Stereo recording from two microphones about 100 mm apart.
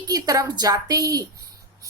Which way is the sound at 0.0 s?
40° right (ahead or behind).